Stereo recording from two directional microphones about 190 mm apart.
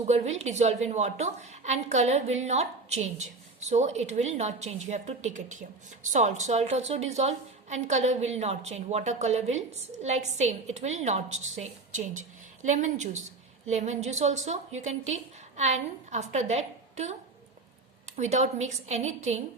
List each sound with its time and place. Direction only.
0.1 s a woman's voice: 35° right (ahead or behind)
12.6 s a woman's voice: 40° right (ahead or behind)
18.2 s a woman's voice: 35° right (ahead or behind)